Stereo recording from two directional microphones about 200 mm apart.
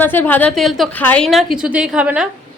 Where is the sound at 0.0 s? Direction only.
10° left (ahead or behind); by 2.2 s 5° right (ahead or behind).